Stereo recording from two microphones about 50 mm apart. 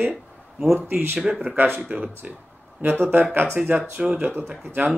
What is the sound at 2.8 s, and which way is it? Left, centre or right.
Speech, right.